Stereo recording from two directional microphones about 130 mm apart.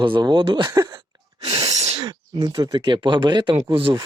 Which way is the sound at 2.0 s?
30° right (ahead or behind).